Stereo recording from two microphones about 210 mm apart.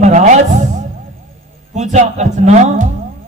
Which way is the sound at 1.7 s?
35° right (ahead or behind).